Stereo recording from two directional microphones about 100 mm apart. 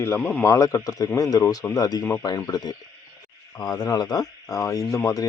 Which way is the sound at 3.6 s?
45° left (ahead or behind).